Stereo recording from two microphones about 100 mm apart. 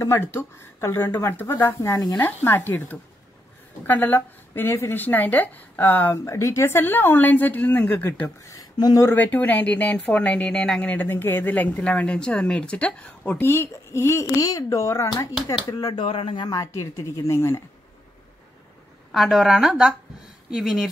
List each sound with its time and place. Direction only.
0.0 s a woman's voice: 25° left (ahead or behind)
2.1 s a woman's voice: 20° left (ahead or behind)
6.1 s a woman's voice: 30° left (ahead or behind)
8.5 s speech: 40° left (ahead or behind)
9.0 s speech: 20° left (ahead or behind)
15.8 s speech: 55° left (ahead or behind)
16.4 s speech: 35° left (ahead or behind)
19.1 s speech: centre (ahead or behind)